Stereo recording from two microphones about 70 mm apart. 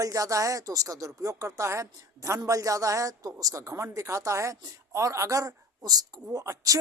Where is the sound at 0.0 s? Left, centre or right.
Right.